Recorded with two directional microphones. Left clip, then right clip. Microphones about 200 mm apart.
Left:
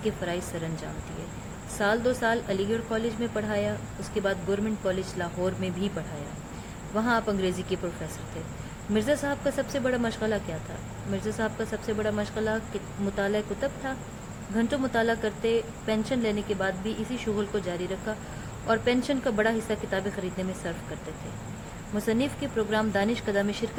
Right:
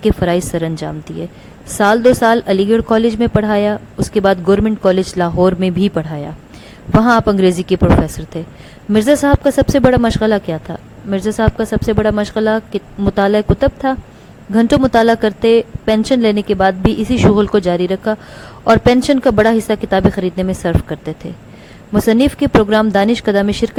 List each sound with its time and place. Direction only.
0.0 s a woman's voice: 45° right (ahead or behind)
7.0 s a woman's voice: 45° right (ahead or behind)
8.9 s a woman's voice: 45° right (ahead or behind)
21.9 s a woman's voice: 45° right (ahead or behind)